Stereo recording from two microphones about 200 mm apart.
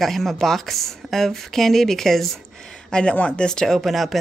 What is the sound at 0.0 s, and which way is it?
Speech, centre (ahead or behind).